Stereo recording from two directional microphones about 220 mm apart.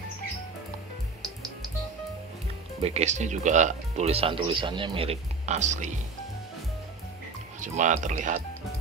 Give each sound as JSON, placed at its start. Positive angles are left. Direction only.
{"t": 2.8, "sound": "speech", "side_deg": -30}
{"t": 7.6, "sound": "speech", "side_deg": -35}